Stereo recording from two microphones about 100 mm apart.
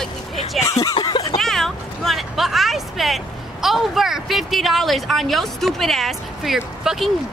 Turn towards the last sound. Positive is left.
turn(degrees=-5)  # may be behind; listen again after turning